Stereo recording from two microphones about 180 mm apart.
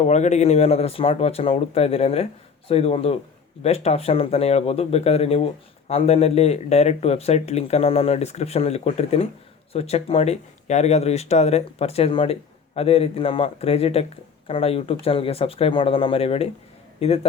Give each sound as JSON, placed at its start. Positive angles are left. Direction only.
{"t": 0.0, "sound": "speech", "side_deg": 40}